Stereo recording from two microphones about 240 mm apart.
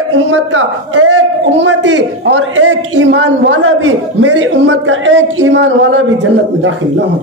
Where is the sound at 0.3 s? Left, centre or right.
Right.